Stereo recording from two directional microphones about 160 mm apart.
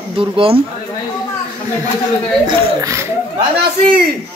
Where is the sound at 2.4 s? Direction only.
20° right (ahead or behind).